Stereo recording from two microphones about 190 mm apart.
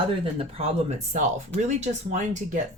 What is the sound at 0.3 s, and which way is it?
A woman's voice, 30° right (ahead or behind).